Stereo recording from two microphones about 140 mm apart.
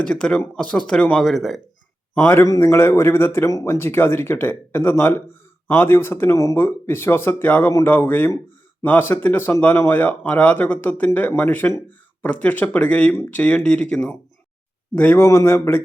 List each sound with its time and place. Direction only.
0.0 s speech: 5° left (ahead or behind)
2.1 s speech: 15° left (ahead or behind)